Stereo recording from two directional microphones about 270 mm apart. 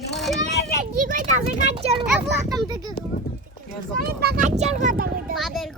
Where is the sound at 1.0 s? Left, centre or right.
Right.